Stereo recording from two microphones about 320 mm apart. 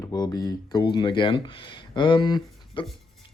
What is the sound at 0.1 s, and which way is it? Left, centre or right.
Speech, centre.